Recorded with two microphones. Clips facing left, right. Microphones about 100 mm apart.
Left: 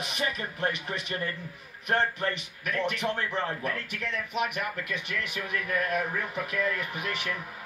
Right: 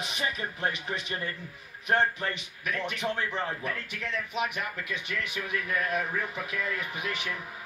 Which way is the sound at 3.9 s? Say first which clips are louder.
Left 1 dB; 50° left (ahead or behind).